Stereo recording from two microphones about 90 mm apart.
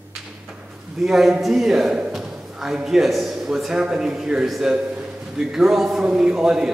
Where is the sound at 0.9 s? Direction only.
5° right (ahead or behind).